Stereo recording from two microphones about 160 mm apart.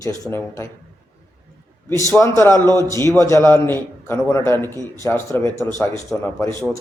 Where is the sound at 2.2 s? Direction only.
15° left (ahead or behind).